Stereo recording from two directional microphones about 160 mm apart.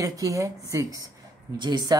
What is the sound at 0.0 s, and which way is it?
Speech, 20° right (ahead or behind).